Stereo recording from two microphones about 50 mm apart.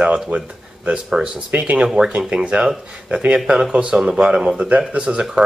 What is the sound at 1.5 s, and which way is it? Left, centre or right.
Speech, right.